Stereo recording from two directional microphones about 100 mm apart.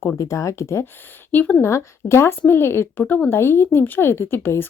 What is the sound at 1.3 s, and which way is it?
Speech, 15° left (ahead or behind).